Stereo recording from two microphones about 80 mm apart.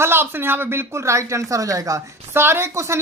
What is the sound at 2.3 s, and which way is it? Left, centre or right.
Speech, right.